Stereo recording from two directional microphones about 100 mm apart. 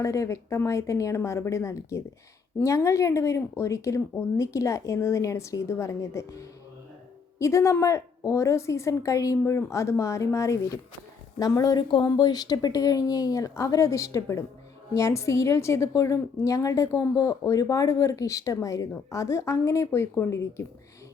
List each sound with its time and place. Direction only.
0.0 s a woman's voice: 30° left (ahead or behind)
11.8 s speech: 55° left (ahead or behind)
12.0 s a woman's voice: 45° left (ahead or behind); by 20.5 s 25° left (ahead or behind)